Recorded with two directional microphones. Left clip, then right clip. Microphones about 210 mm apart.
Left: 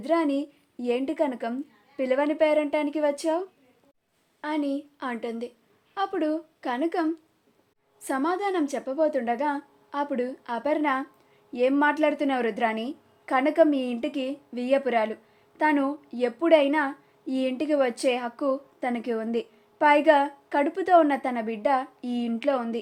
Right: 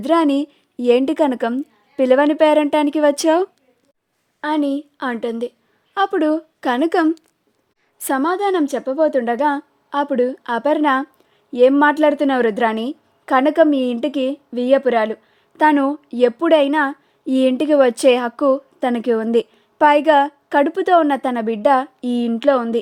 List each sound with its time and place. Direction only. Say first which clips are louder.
0.0 s a woman's voice: right 9 dB; 50° right (ahead or behind)